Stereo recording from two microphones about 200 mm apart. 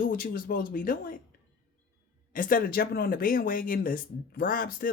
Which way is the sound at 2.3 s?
45° left (ahead or behind).